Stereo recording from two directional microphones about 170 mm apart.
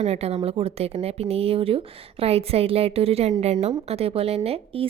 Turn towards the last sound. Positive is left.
turn(degrees=-35)  # may be behind; listen again after turning